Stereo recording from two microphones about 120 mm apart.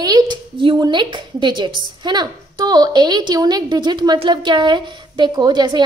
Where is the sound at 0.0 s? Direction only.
35° right (ahead or behind).